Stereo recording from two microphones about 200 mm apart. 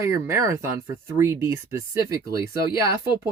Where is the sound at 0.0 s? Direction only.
15° right (ahead or behind).